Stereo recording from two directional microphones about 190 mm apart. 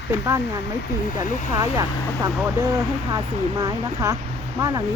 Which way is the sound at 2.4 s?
10° right (ahead or behind).